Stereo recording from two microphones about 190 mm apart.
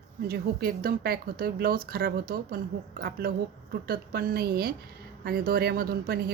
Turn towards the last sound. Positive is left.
turn(degrees=-55)  # may be behind; listen again after turning